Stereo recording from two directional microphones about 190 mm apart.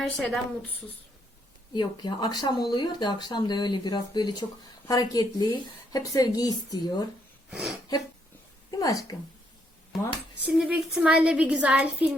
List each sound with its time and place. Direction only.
0.0 s a woman's voice: 5° left (ahead or behind)
1.7 s speech: 25° left (ahead or behind)
8.7 s speech: 20° left (ahead or behind)
10.4 s a woman's voice: 5° right (ahead or behind)